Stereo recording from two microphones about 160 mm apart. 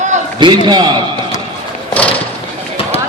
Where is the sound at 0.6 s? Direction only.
25° right (ahead or behind).